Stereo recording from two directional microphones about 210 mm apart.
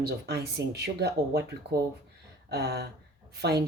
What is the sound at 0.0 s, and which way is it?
Speech, 50° right (ahead or behind).